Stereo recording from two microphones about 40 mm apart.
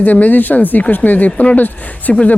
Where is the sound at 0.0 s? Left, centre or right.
Left.